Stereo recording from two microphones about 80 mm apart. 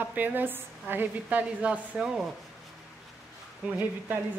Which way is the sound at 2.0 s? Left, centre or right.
Centre.